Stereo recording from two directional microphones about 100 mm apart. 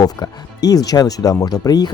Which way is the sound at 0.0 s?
40° left (ahead or behind).